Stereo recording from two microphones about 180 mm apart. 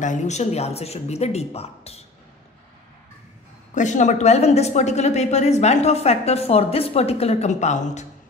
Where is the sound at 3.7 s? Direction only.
40° left (ahead or behind).